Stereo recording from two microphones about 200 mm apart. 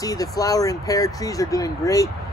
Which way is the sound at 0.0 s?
20° left (ahead or behind).